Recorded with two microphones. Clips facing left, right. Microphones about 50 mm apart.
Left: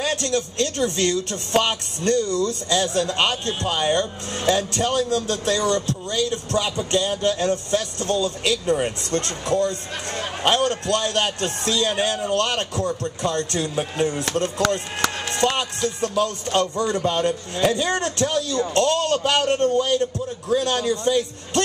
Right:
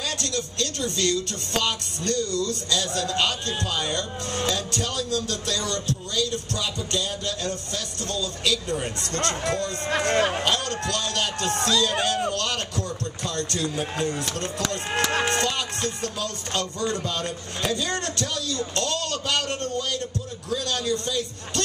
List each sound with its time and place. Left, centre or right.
0.0 s speech: left
9.1 s speech: right
10.4 s speech: left
15.4 s speech: left